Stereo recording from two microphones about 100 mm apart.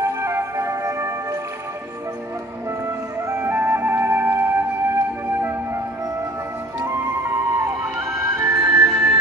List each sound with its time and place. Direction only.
0.0 s music: 25° right (ahead or behind)
3.3 s music: 30° right (ahead or behind)
8.6 s music: 5° right (ahead or behind)
8.9 s music: 25° right (ahead or behind)